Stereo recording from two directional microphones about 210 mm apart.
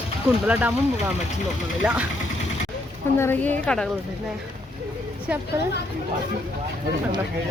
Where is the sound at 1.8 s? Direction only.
5° right (ahead or behind).